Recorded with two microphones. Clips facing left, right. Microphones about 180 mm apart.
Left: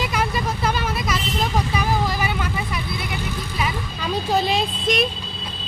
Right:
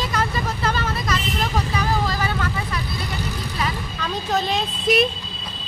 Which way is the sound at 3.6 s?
10° left (ahead or behind).